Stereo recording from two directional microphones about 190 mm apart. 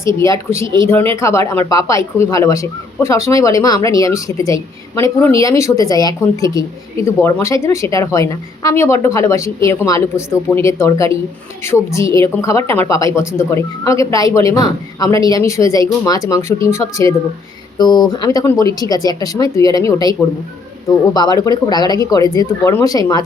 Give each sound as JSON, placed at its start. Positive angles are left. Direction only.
{"t": 0.0, "sound": "a woman's voice", "side_deg": 15}